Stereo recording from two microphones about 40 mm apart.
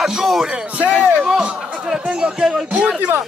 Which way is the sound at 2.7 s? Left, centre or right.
Right.